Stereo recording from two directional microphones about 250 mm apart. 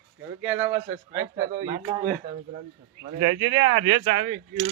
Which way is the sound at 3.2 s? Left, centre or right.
Centre.